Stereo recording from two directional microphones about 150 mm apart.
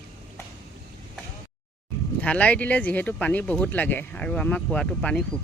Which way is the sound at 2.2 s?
10° left (ahead or behind).